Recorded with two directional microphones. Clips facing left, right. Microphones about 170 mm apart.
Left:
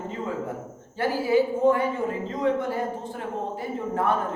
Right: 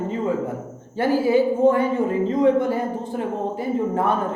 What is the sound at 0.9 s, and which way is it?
A woman's voice, 20° right (ahead or behind).